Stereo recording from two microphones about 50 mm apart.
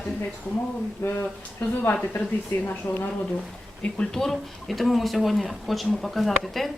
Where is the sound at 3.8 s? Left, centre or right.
Left.